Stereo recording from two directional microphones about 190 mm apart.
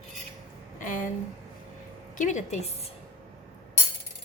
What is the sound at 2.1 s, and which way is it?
Speech, 40° left (ahead or behind).